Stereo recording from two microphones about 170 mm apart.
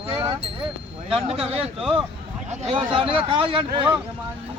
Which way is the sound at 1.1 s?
35° right (ahead or behind).